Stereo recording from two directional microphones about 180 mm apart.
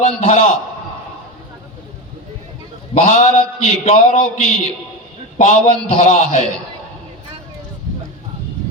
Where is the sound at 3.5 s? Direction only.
40° left (ahead or behind).